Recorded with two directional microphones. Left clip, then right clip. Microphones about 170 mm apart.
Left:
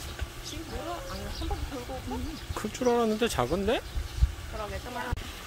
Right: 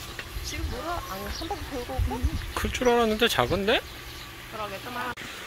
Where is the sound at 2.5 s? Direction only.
5° left (ahead or behind).